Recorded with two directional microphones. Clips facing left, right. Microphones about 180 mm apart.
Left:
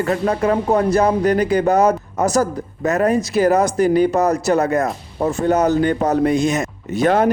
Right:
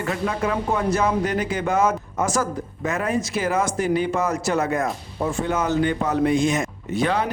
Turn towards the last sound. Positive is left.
turn(degrees=45)  # may be behind; listen again after turning